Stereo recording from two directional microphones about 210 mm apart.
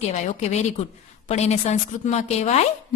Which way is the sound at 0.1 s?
30° left (ahead or behind).